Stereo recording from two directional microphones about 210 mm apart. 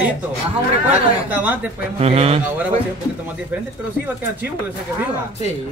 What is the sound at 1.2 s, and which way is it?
Speech, 5° right (ahead or behind).